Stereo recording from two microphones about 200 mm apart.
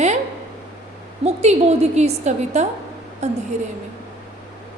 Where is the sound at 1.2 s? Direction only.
30° right (ahead or behind).